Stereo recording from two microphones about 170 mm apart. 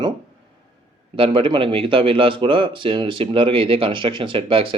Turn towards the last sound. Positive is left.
turn(degrees=-30)  # may be behind; listen again after turning